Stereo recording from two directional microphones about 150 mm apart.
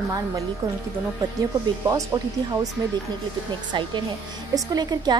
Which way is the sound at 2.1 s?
25° right (ahead or behind).